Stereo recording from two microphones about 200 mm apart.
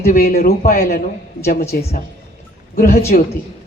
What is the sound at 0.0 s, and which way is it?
Speech, 50° left (ahead or behind).